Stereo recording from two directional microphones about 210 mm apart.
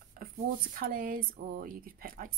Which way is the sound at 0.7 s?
40° right (ahead or behind).